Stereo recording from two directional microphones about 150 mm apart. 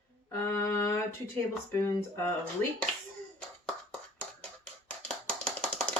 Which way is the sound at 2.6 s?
10° left (ahead or behind).